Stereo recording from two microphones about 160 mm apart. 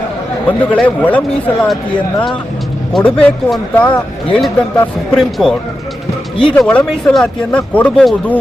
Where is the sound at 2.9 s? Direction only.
5° left (ahead or behind).